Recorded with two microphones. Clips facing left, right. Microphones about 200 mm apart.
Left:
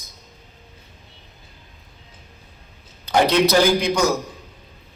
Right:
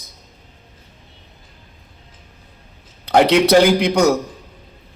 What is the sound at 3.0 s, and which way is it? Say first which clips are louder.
A man's voice: right 4 dB; 70° right (ahead or behind).